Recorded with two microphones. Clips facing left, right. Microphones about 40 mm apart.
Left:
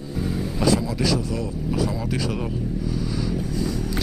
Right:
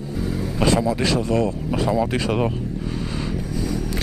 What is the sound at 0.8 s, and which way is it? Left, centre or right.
Speech, right.